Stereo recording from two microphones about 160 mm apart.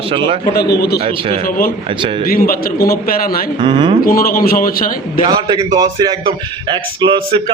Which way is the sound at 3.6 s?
30° right (ahead or behind).